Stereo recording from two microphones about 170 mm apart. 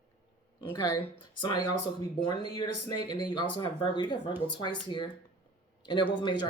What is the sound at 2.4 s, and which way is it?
Speech, 25° left (ahead or behind).